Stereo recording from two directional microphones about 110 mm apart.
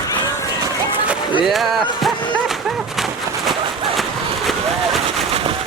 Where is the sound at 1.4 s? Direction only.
Centre (ahead or behind).